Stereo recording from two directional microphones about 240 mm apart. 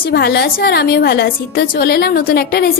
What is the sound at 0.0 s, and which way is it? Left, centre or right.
A woman's voice, left.